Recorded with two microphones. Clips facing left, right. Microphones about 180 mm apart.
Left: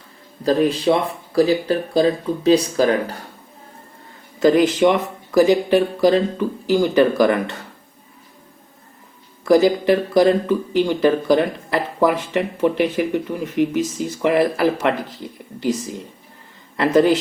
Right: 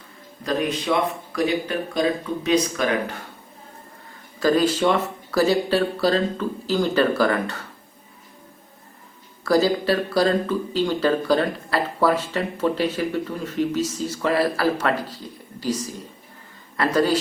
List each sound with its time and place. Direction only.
0.4 s speech: 30° left (ahead or behind)
4.4 s speech: 20° left (ahead or behind)
9.4 s speech: 20° left (ahead or behind)